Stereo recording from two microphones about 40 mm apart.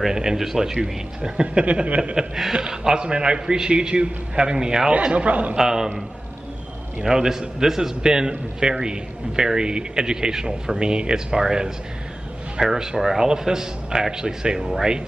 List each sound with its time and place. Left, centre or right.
0.0 s a man's voice: centre
2.1 s a man's voice: centre
5.0 s speech: right
5.6 s a man's voice: centre
7.0 s a man's voice: centre